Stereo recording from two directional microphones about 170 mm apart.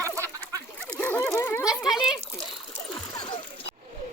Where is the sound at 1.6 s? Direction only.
5° right (ahead or behind).